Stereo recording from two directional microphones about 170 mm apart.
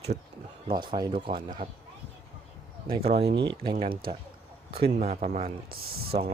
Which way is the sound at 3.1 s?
75° right (ahead or behind).